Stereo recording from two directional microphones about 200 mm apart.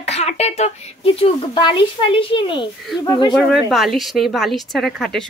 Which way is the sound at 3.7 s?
Centre (ahead or behind).